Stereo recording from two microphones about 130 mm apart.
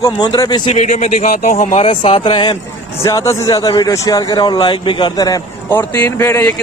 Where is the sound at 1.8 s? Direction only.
45° left (ahead or behind).